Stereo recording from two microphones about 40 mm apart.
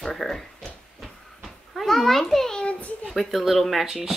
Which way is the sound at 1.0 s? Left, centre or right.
Centre.